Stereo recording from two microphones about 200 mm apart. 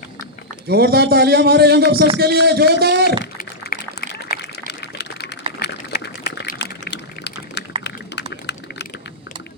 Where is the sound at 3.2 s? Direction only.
45° left (ahead or behind); by 9.1 s 60° left (ahead or behind).